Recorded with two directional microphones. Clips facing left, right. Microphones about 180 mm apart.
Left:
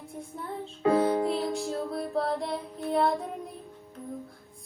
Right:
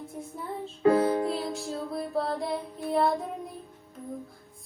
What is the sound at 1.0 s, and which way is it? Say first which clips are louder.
Music: even; 25° left (ahead or behind).